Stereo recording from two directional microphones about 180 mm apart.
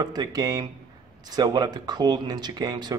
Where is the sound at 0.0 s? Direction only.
20° right (ahead or behind).